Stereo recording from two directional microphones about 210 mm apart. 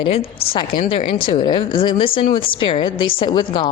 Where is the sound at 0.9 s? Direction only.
25° left (ahead or behind).